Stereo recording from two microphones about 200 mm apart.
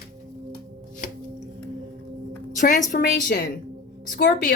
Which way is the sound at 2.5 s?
40° left (ahead or behind).